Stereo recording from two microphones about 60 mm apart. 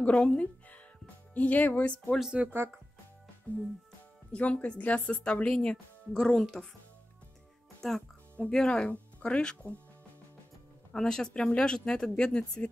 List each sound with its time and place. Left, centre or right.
0.0 s speech: centre
2.4 s speech: centre
4.3 s speech: left
7.8 s speech: centre
10.9 s speech: centre